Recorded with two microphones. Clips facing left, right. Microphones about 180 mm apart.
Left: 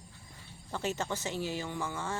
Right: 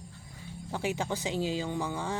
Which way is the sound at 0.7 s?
10° right (ahead or behind).